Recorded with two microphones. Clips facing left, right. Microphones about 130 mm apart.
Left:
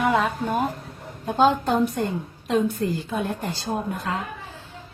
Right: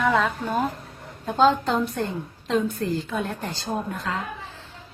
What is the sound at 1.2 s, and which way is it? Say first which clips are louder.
A woman's voice: even; 15° left (ahead or behind).